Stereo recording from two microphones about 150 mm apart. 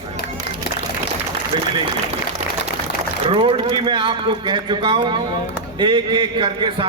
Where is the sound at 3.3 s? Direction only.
35° right (ahead or behind).